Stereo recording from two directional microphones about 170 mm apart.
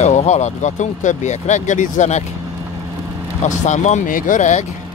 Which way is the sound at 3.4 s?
45° left (ahead or behind).